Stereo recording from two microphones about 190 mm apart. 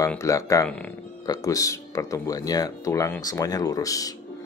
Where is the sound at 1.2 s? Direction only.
20° left (ahead or behind).